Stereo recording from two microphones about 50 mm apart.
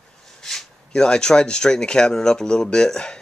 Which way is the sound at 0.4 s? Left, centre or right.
Centre.